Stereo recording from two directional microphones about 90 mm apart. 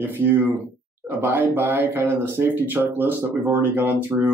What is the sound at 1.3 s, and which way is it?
Speech, 20° right (ahead or behind).